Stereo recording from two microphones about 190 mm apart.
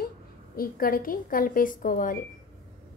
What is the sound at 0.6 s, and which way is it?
A woman's voice, 50° left (ahead or behind).